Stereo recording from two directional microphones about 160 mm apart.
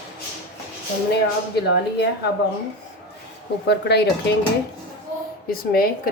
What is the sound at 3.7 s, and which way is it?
Speech, 90° left.